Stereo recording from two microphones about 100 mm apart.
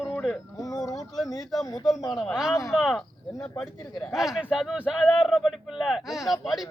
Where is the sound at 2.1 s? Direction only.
Centre (ahead or behind).